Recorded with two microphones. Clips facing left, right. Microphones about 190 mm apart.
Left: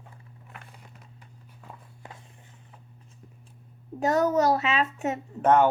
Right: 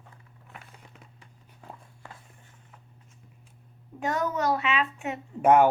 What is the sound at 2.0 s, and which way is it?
Walk, 20° left (ahead or behind).